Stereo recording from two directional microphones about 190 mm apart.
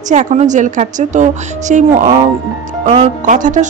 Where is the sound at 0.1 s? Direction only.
40° right (ahead or behind).